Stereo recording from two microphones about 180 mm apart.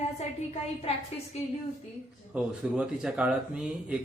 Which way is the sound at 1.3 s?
35° left (ahead or behind).